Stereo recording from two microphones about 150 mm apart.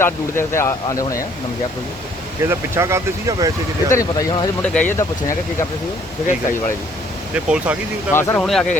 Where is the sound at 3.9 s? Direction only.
20° left (ahead or behind).